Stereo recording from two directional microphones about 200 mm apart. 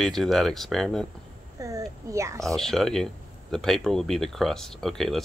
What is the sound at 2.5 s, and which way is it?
Speech, centre (ahead or behind).